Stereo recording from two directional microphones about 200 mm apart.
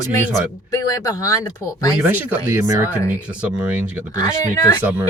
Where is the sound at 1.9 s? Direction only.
10° right (ahead or behind).